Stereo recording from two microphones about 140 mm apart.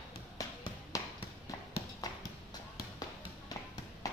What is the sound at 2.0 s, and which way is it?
Clip-clop, 25° left (ahead or behind).